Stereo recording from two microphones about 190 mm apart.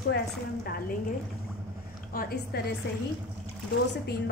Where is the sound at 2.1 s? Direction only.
50° left (ahead or behind).